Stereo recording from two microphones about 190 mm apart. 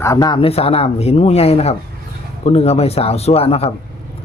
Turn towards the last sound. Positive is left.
turn(degrees=30)  # may be behind; listen again after turning